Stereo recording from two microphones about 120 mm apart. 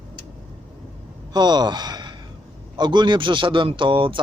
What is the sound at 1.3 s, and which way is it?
A man's voice, 35° right (ahead or behind).